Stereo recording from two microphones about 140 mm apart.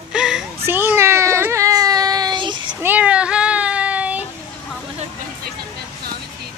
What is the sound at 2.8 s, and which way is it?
Child singing, 10° right (ahead or behind).